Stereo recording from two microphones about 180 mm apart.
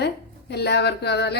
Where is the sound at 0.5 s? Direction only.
65° left (ahead or behind).